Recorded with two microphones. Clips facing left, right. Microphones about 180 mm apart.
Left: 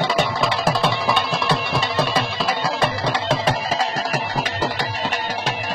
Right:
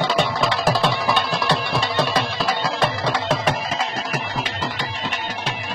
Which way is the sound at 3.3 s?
35° left (ahead or behind).